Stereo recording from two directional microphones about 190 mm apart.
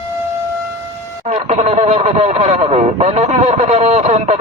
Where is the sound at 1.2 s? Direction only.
35° right (ahead or behind).